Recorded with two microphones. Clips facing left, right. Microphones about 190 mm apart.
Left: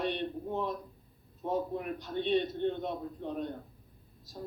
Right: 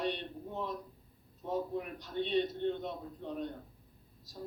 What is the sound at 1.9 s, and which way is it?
Speech, 55° left (ahead or behind).